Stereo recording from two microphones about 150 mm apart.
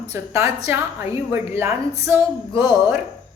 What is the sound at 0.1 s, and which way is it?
A woman's voice, 20° right (ahead or behind).